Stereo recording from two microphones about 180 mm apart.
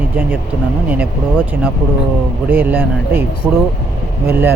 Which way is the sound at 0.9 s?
10° right (ahead or behind).